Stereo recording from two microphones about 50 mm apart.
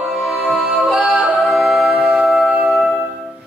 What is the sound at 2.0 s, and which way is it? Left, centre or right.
Music, centre.